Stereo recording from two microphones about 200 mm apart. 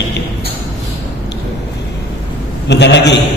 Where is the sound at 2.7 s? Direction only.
60° left (ahead or behind).